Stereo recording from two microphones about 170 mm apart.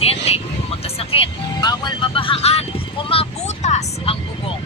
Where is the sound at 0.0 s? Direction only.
35° left (ahead or behind).